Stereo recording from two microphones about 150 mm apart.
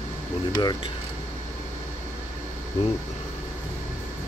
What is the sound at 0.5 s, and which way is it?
Speech, 30° left (ahead or behind).